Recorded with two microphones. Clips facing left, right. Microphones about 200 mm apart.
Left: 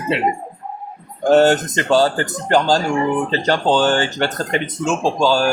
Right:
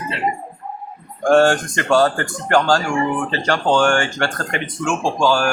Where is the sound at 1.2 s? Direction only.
20° left (ahead or behind).